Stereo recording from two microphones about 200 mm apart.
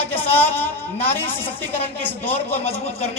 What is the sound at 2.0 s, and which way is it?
Speech, 10° left (ahead or behind).